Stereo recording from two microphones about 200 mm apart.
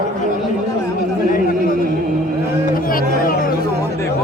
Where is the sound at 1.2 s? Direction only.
45° left (ahead or behind).